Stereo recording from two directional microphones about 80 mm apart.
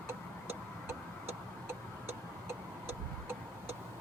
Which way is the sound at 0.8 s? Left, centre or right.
Right.